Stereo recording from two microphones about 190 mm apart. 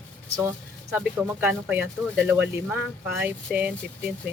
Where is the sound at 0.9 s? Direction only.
10° right (ahead or behind).